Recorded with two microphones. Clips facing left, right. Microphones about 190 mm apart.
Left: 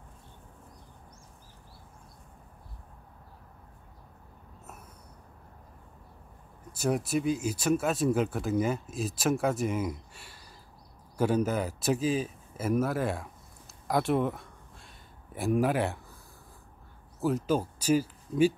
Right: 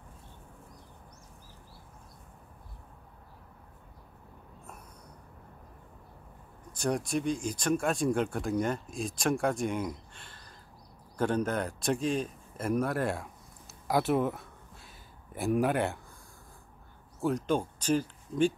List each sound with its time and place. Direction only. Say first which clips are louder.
6.7 s speech: left 2 dB; 5° left (ahead or behind)
17.2 s speech: left 1 dB; 5° left (ahead or behind)